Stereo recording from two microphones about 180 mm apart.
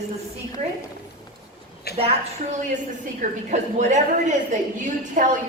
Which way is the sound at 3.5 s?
40° right (ahead or behind).